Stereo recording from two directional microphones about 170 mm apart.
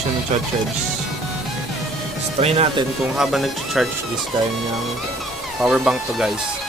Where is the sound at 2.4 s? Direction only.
35° right (ahead or behind).